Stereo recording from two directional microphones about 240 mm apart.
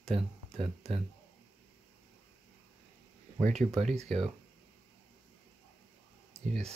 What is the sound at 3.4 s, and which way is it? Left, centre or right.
Speech, right.